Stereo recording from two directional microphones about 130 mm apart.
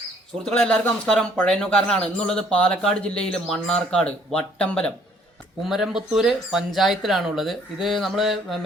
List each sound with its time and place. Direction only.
0.4 s speech: 5° left (ahead or behind)
5.6 s speech: 5° right (ahead or behind)